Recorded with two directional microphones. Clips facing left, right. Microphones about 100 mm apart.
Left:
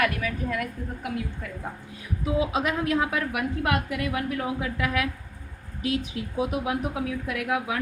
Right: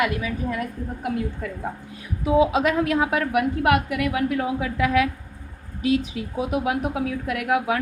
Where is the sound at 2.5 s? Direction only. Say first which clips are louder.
Right 4 dB; 80° right.